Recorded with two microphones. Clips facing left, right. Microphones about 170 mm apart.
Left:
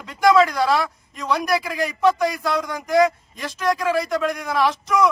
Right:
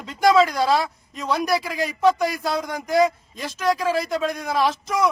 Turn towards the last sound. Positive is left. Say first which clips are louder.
# left 1 dB
turn(degrees=-30)  # may be behind; listen again after turning